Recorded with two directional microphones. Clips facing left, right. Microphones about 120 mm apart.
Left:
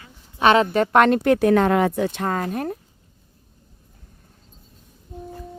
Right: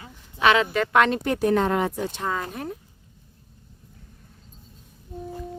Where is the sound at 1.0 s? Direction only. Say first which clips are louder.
Left 5 dB; 60° left (ahead or behind).